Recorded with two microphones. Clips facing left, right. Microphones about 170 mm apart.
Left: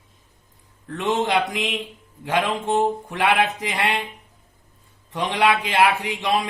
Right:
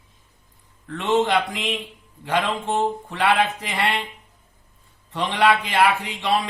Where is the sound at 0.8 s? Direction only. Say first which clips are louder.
Right 2 dB; 15° left (ahead or behind).